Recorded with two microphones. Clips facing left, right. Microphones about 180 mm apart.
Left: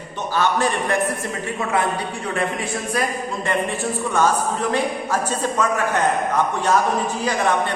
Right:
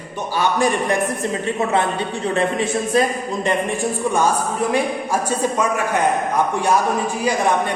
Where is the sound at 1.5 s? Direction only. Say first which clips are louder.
Even; 25° right (ahead or behind).